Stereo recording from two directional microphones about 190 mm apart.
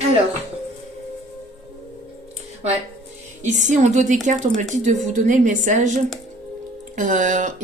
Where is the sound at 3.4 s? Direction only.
40° right (ahead or behind).